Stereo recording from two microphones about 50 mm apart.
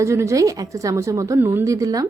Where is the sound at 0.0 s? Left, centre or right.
Right.